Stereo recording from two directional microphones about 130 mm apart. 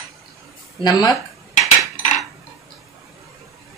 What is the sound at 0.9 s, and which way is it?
Speech, 30° left (ahead or behind).